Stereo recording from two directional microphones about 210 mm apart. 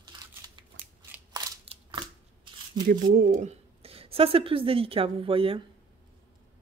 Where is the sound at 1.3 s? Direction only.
20° right (ahead or behind).